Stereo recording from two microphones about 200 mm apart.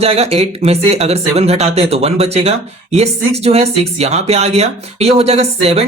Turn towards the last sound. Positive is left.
turn(degrees=-30)  # may be behind; listen again after turning